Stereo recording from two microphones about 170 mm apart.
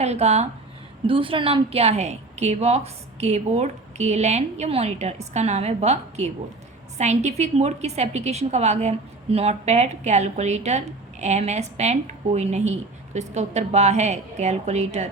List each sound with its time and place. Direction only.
0.0 s a woman's voice: 40° right (ahead or behind)